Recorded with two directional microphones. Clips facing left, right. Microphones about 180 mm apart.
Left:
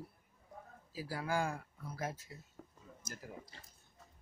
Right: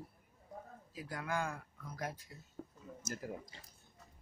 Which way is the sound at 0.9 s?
30° left (ahead or behind).